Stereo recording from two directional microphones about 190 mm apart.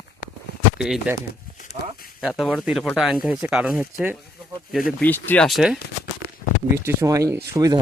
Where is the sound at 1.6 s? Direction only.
50° left (ahead or behind).